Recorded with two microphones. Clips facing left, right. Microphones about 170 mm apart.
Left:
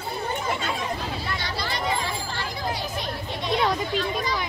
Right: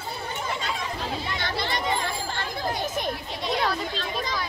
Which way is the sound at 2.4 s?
50° right (ahead or behind).